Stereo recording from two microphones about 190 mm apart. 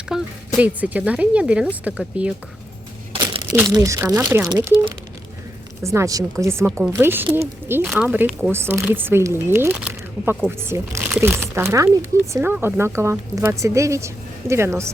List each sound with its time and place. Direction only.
0.1 s a sound: 5° right (ahead or behind)
0.6 s speech: 10° right (ahead or behind)
3.1 s crumpling: 25° right (ahead or behind)
3.5 s speech: 15° right (ahead or behind)
5.8 s speech: 15° right (ahead or behind)